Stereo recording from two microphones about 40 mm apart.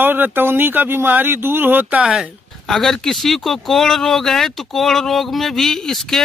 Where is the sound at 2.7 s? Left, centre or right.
Centre.